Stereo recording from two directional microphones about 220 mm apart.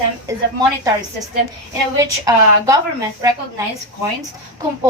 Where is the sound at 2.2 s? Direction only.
15° right (ahead or behind).